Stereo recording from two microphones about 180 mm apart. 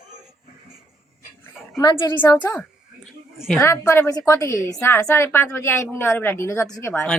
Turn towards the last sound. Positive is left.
turn(degrees=15)  # may be behind; listen again after turning